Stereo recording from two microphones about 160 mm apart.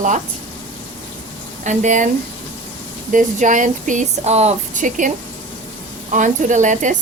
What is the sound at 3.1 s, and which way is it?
Speech, 50° right (ahead or behind).